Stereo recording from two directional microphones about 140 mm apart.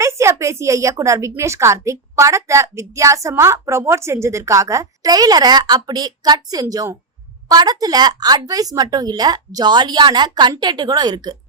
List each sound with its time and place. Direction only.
0.0 s a woman's voice: 20° right (ahead or behind)